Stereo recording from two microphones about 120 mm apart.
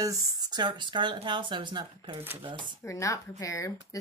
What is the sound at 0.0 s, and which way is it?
Speech, 30° right (ahead or behind).